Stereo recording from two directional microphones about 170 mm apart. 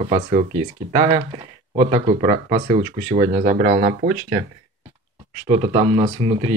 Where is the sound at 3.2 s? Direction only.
50° right (ahead or behind).